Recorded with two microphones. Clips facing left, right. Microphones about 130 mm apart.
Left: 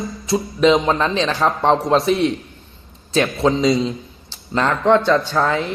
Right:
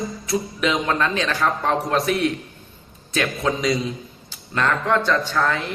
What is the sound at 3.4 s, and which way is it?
A man's voice, 25° left (ahead or behind).